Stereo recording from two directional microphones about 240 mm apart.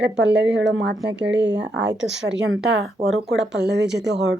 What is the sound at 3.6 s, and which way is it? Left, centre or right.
Speech, right.